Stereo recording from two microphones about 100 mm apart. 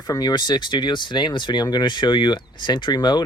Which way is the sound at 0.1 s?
40° left (ahead or behind).